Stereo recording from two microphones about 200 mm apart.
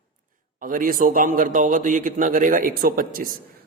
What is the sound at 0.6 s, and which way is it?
A man's voice, 45° right (ahead or behind).